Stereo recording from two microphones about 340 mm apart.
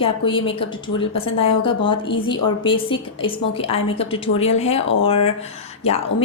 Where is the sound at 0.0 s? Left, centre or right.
Centre.